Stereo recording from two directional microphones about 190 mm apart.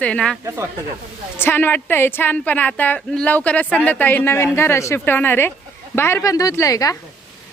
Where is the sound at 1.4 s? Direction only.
10° left (ahead or behind).